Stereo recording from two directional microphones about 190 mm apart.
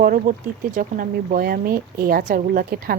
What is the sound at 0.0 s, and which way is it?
Speech, 45° right (ahead or behind).